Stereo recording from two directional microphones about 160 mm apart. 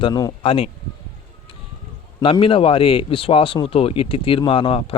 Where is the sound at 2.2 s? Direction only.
35° left (ahead or behind).